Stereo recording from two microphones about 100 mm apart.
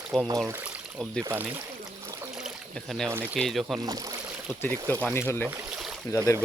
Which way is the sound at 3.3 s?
Centre (ahead or behind).